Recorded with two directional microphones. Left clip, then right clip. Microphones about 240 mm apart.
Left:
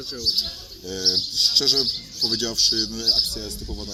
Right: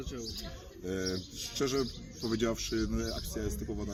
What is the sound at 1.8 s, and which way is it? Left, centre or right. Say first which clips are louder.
Speech: left 13 dB; centre.